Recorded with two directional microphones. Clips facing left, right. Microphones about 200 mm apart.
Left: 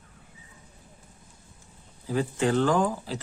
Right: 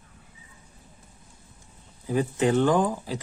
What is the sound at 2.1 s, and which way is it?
Speech, 15° right (ahead or behind).